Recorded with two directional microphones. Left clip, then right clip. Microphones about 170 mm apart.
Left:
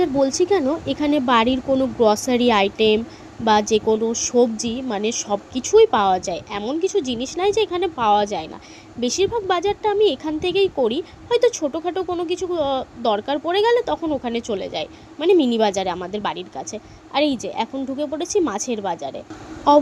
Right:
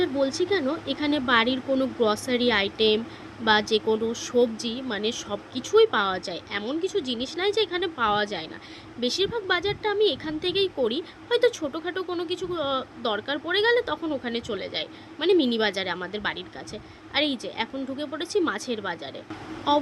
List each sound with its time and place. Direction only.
0.0 s speech: 30° left (ahead or behind)